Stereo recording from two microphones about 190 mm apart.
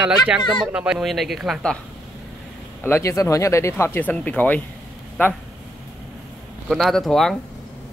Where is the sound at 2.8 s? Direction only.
15° left (ahead or behind).